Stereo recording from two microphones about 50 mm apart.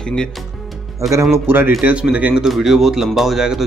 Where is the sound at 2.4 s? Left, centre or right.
Centre.